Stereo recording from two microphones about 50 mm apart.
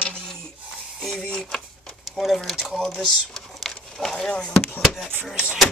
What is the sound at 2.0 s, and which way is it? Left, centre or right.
Speech, centre.